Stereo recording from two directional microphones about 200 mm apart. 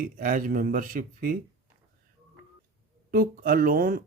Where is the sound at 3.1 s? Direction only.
45° right (ahead or behind).